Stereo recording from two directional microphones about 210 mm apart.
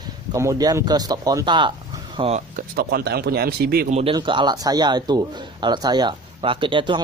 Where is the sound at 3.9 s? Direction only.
30° right (ahead or behind).